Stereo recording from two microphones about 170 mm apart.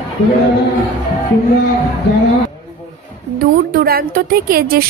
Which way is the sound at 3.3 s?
60° right (ahead or behind).